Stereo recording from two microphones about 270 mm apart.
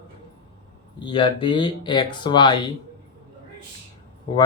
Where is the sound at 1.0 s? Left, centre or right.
Centre.